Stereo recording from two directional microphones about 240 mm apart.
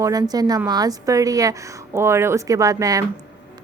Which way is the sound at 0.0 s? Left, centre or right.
Centre.